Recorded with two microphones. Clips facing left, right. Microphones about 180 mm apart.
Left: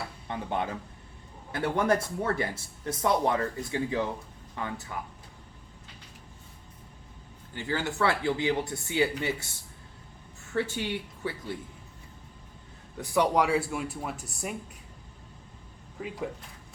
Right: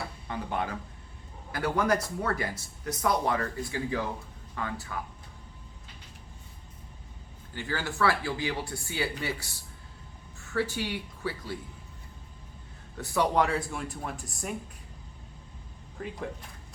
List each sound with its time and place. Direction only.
0.3 s speech: 25° left (ahead or behind)
7.5 s speech: 20° left (ahead or behind)
10.5 s speech: 20° left (ahead or behind)
13.0 s speech: 10° left (ahead or behind)
16.0 s speech: 5° left (ahead or behind)